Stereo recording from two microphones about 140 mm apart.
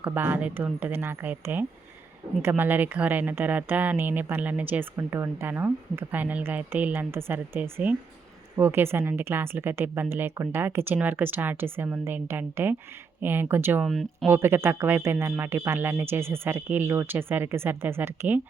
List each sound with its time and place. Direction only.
0.0 s speech: 15° right (ahead or behind)
13.8 s speech: centre (ahead or behind)
14.3 s speech: 15° right (ahead or behind)